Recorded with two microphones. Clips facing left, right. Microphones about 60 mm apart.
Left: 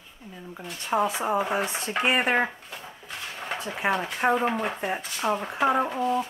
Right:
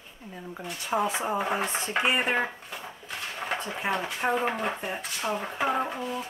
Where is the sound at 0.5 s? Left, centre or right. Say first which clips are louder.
Left 3 dB; centre.